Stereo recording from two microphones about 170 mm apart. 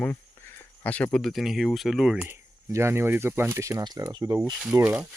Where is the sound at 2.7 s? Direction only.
15° right (ahead or behind).